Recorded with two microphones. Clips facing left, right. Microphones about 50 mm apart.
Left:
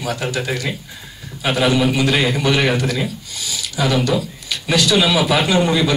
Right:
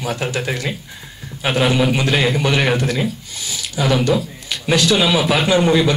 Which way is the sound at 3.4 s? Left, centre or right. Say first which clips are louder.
Left 1 dB; right.